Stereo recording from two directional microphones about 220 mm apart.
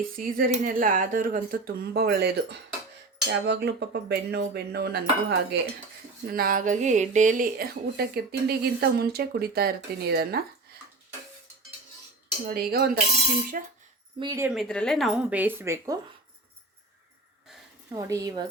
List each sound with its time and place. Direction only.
0.2 s speech: 40° right (ahead or behind)
12.5 s speech: 45° right (ahead or behind)
14.2 s a woman's voice: 15° right (ahead or behind)
14.5 s speech: centre (ahead or behind)
17.9 s a woman's voice: 15° right (ahead or behind)